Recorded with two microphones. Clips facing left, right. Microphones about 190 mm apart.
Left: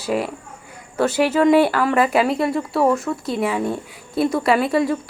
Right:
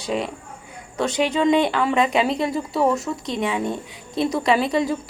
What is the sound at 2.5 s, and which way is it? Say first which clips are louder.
A woman's voice: left 2 dB; centre (ahead or behind).